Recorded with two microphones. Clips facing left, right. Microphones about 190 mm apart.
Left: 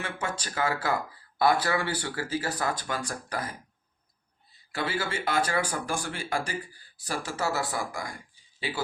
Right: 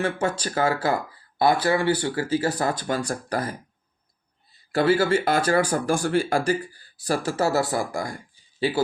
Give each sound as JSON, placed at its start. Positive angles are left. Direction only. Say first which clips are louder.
{"t": 0.0, "sound": "speech", "louder": "right 9 dB", "side_deg": -35}
{"t": 4.7, "sound": "speech", "louder": "right 12 dB", "side_deg": -40}